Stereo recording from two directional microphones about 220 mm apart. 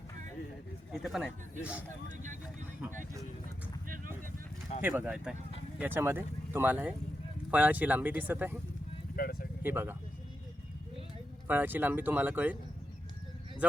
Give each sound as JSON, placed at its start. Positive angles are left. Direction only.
{"t": 0.9, "sound": "speech", "side_deg": 0}
{"t": 2.0, "sound": "speech", "side_deg": -35}
{"t": 3.8, "sound": "vehicle", "side_deg": -40}
{"t": 4.8, "sound": "speech", "side_deg": -10}
{"t": 9.1, "sound": "speech", "side_deg": 40}
{"t": 9.6, "sound": "speech", "side_deg": -10}
{"t": 11.4, "sound": "speech", "side_deg": -10}